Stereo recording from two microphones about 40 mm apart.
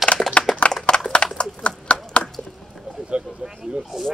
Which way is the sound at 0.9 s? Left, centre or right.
Left.